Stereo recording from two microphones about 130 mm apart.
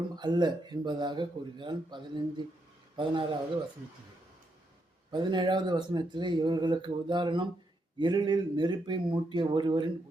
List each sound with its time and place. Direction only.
0.2 s a man's voice: 35° right (ahead or behind)
5.1 s speech: 35° right (ahead or behind)